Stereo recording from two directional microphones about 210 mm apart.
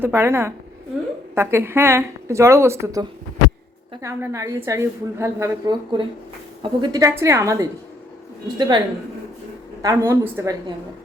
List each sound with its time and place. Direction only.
0.0 s a woman's voice: 10° right (ahead or behind)
9.8 s a woman's voice: 10° right (ahead or behind)